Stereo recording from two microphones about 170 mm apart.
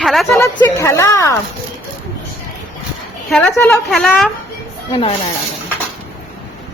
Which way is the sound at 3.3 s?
5° left (ahead or behind).